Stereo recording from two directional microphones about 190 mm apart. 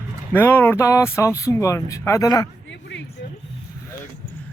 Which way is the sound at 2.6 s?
65° left (ahead or behind).